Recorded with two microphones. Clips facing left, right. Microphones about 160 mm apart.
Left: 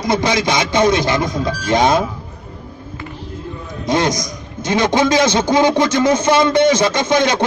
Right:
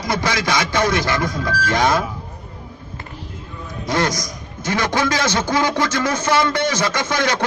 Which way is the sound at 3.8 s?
20° left (ahead or behind).